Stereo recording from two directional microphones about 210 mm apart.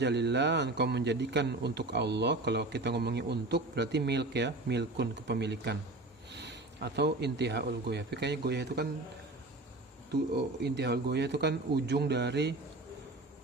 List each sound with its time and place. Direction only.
0.0 s a man's voice: 55° right (ahead or behind)
10.3 s a man's voice: 55° right (ahead or behind)